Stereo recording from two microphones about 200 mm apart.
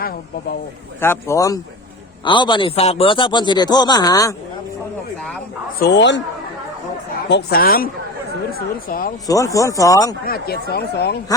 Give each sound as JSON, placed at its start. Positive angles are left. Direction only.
{"t": 1.0, "sound": "a man's voice", "side_deg": 15}
{"t": 5.8, "sound": "a man's voice", "side_deg": 60}
{"t": 7.3, "sound": "speech", "side_deg": 55}
{"t": 8.9, "sound": "speech", "side_deg": 45}
{"t": 9.2, "sound": "speech", "side_deg": 15}
{"t": 10.2, "sound": "speech", "side_deg": 50}